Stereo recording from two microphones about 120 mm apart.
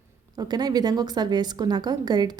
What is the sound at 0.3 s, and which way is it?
A woman's voice, 35° right (ahead or behind).